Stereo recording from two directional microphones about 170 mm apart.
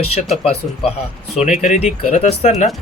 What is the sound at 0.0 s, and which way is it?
Speech, 35° left (ahead or behind).